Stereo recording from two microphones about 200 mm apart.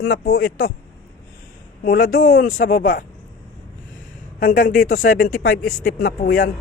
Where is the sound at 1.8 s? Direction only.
45° left (ahead or behind).